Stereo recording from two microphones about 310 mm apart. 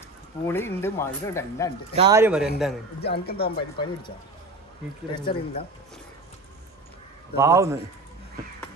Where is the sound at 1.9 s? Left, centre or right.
Centre.